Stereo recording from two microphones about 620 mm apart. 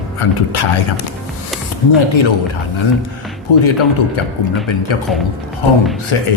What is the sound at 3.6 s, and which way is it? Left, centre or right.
Speech, left.